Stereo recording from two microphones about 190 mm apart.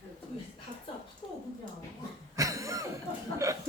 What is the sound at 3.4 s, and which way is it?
Chuckle, 15° right (ahead or behind).